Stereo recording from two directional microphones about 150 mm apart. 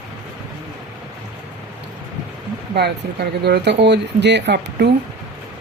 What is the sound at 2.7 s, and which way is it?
Speech, 90° right.